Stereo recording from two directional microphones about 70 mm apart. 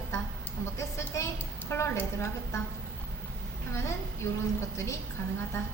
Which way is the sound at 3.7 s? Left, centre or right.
Left.